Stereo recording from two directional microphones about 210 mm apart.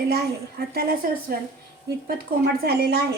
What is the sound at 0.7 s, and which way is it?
Speech, 45° right (ahead or behind).